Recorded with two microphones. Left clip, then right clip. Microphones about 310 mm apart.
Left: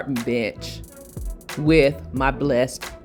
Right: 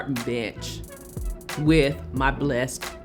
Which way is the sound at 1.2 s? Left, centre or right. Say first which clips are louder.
Left 1 dB; centre.